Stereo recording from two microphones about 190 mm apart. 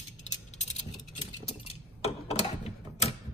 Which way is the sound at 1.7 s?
35° left (ahead or behind).